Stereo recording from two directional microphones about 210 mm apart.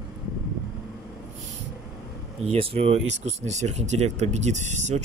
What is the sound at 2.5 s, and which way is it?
Speech, 30° right (ahead or behind).